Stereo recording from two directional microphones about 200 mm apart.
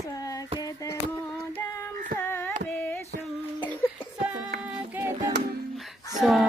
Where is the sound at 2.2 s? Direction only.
10° left (ahead or behind).